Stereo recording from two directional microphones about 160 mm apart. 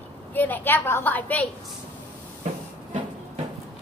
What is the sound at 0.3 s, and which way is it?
A woman's voice, 10° left (ahead or behind).